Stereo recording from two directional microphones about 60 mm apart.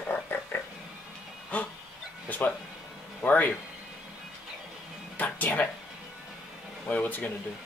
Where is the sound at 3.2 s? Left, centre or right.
Left.